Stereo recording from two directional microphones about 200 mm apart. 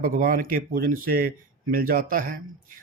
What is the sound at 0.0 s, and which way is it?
Speech, 45° right (ahead or behind).